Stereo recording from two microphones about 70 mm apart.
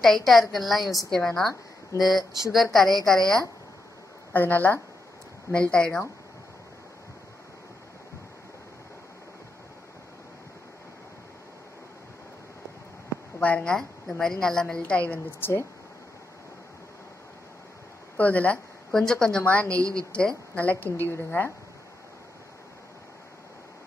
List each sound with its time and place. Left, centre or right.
0.0 s a woman's voice: centre
4.3 s a woman's voice: left
5.5 s a woman's voice: centre
13.4 s a woman's voice: centre
15.4 s speech: left
18.1 s speech: left
18.9 s a woman's voice: centre
19.4 s a woman's voice: left
19.8 s a woman's voice: right
20.1 s a woman's voice: centre; by 21.5 s left